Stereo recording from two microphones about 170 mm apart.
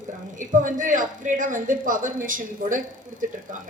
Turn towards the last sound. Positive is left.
turn(degrees=-50)  # may be behind; listen again after turning